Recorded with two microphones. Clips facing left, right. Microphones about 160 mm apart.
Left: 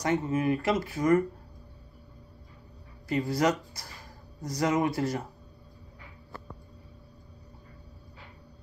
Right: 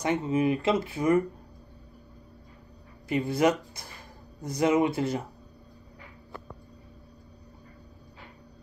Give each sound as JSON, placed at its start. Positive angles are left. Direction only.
{"t": 0.0, "sound": "speech", "side_deg": -20}
{"t": 3.1, "sound": "speech", "side_deg": -20}